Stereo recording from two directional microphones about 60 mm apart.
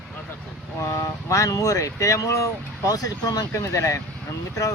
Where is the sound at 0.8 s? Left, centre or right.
Left.